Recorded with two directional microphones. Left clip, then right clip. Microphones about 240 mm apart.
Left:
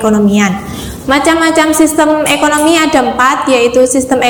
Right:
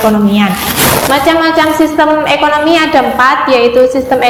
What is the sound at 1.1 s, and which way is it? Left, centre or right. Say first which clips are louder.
A woman's voice: left 3 dB; left.